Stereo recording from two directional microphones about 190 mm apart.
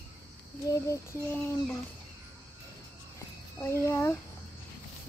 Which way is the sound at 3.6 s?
15° left (ahead or behind).